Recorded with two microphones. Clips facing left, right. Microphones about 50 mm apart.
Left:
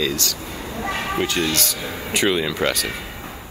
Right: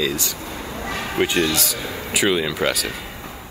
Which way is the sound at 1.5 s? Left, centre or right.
Centre.